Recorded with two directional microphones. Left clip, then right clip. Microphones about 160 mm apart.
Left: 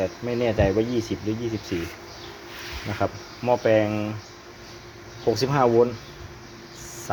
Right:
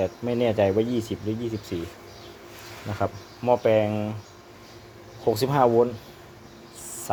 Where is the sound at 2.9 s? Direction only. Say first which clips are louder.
Left 1 dB; centre (ahead or behind).